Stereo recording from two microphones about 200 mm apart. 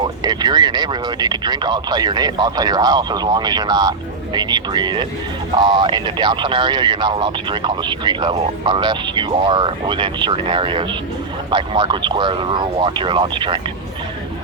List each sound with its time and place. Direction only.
0.0 s speech: 20° right (ahead or behind)